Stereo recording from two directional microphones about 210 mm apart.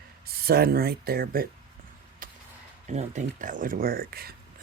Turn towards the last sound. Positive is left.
turn(degrees=-45)  # may be behind; listen again after turning